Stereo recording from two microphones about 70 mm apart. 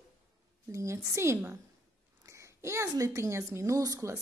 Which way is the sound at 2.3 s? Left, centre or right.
Right.